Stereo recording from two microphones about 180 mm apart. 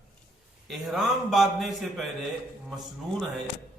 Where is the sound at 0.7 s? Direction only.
Centre (ahead or behind).